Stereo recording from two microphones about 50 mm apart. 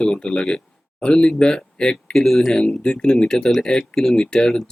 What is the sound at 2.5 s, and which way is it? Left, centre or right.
A man's voice, centre.